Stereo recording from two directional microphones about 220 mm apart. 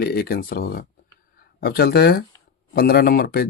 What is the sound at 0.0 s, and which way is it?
Speech, 45° left (ahead or behind).